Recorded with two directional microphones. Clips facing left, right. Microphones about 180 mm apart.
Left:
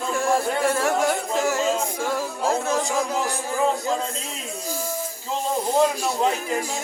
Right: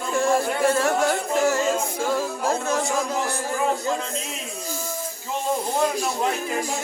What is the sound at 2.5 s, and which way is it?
Music, centre (ahead or behind).